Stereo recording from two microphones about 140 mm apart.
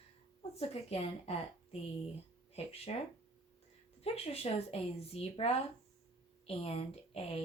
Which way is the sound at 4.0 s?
45° left (ahead or behind).